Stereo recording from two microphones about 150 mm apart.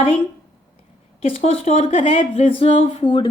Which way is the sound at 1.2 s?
40° left (ahead or behind).